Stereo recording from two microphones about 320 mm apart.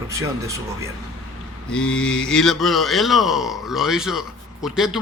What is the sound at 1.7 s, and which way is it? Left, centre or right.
Speech, centre.